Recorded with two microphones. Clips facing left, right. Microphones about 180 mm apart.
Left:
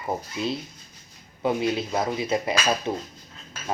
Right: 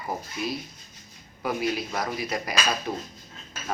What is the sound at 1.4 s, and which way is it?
Speech, 25° left (ahead or behind).